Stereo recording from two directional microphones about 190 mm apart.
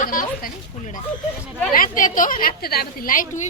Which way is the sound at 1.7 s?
45° left (ahead or behind).